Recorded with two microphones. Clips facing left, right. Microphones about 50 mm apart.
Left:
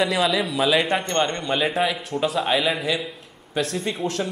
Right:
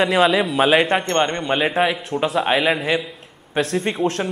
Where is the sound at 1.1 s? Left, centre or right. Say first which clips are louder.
Right 3 dB; centre.